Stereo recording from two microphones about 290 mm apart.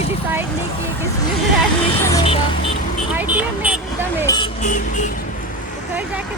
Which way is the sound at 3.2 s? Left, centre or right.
Centre.